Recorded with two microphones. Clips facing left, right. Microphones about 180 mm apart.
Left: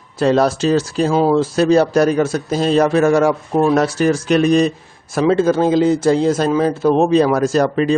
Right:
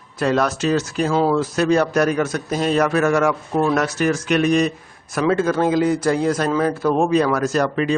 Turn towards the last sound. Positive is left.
turn(degrees=35)  # may be behind; listen again after turning